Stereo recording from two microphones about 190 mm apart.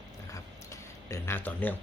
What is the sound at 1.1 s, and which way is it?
Speech, 10° left (ahead or behind).